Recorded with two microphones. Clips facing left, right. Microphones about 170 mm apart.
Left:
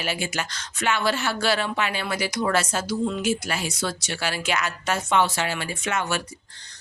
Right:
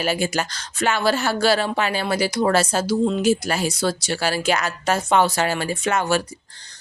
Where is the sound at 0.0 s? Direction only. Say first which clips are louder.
Right 6 dB; 40° right (ahead or behind).